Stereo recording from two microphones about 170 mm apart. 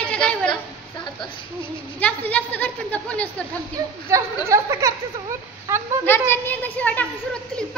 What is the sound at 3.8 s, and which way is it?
Speech, 20° right (ahead or behind).